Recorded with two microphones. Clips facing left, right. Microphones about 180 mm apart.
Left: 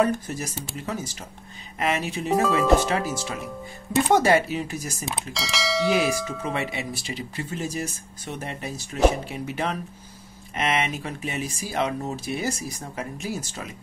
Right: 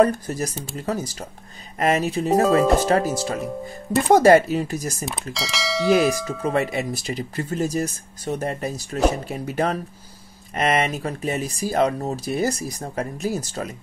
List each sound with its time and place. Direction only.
0.0 s speech: 40° right (ahead or behind)
5.0 s bell: centre (ahead or behind)
6.5 s speech: 45° right (ahead or behind)